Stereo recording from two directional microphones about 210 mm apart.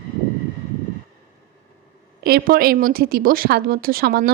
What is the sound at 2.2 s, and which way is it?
A woman's voice, 45° right (ahead or behind).